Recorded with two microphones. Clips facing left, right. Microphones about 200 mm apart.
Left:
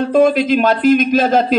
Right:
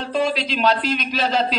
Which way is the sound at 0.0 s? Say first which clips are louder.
Left 10 dB; 50° left (ahead or behind).